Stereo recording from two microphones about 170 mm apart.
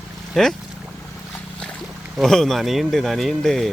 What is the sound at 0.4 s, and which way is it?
Speech, 5° left (ahead or behind).